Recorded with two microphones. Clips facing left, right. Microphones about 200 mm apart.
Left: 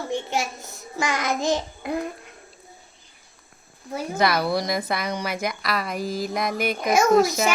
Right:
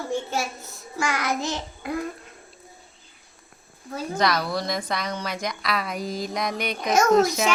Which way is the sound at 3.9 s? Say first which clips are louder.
Left 1 dB; 10° left (ahead or behind).